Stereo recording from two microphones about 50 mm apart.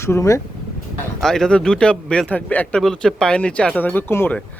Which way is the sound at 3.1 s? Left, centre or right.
Centre.